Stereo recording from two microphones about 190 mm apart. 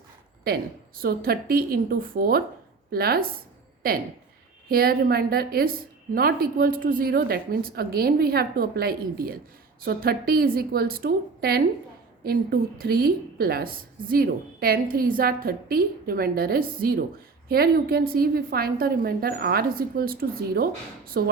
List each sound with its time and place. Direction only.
0.4 s a woman's voice: 55° right (ahead or behind)